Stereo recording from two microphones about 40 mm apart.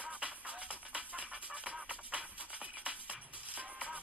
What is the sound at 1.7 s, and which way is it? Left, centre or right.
Music, right.